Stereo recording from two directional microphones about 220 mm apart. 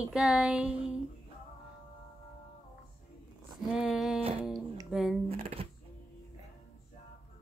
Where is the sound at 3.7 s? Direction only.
Centre (ahead or behind).